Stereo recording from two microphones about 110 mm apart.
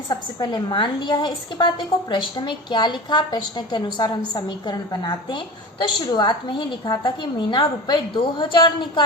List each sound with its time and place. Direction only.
0.1 s a woman's voice: 40° left (ahead or behind)